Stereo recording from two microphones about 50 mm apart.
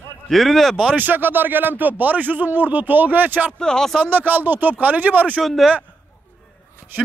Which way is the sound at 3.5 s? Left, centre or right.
Centre.